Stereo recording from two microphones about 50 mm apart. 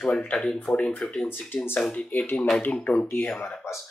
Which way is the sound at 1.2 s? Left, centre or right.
Left.